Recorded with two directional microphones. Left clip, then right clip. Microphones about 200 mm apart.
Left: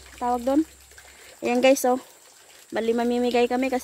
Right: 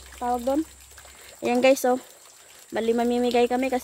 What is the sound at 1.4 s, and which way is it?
Speech, 5° left (ahead or behind).